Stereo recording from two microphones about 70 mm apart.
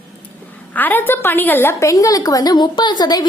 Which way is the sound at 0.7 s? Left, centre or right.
Left.